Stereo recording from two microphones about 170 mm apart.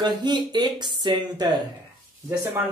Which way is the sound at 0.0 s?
25° right (ahead or behind).